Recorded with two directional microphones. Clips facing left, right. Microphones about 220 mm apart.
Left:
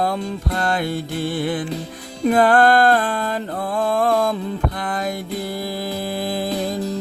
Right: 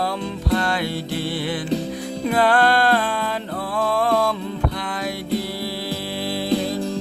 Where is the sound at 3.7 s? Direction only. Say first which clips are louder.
Left 1 dB; 50° left (ahead or behind).